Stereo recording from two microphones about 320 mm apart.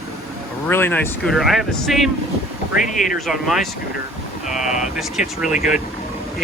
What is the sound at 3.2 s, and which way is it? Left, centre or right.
Speech, centre.